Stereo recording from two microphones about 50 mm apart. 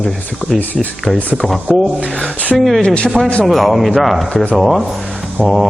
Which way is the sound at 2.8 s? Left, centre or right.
Left.